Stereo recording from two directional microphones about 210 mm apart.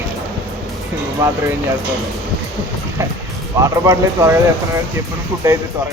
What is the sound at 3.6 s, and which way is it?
Speech, 15° right (ahead or behind).